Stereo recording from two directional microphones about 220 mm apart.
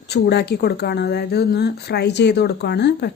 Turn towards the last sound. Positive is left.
turn(degrees=50)  # may be behind; listen again after turning